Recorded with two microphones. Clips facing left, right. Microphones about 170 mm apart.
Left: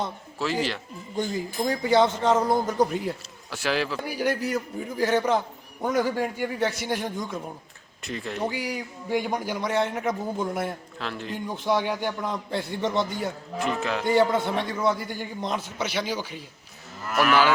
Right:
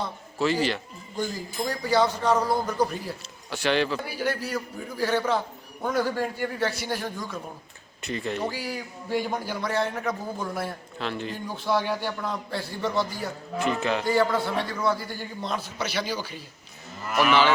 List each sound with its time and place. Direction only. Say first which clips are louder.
0.3 s speech: right 3 dB; centre (ahead or behind)
1.8 s a man's voice: left 2 dB; 20° left (ahead or behind)
3.5 s speech: right 2 dB; centre (ahead or behind)
4.1 s a man's voice: left 3 dB; 15° left (ahead or behind)
8.0 s speech: right 1 dB; centre (ahead or behind)
8.4 s a man's voice: left 2 dB; 15° left (ahead or behind)
10.9 s speech: right 2 dB; centre (ahead or behind)
11.4 s a man's voice: left 1 dB; 20° left (ahead or behind)
13.6 s speech: right 2 dB; centre (ahead or behind)
14.0 s a man's voice: left 4 dB; 20° left (ahead or behind)
17.1 s a man's voice: even; 5° left (ahead or behind)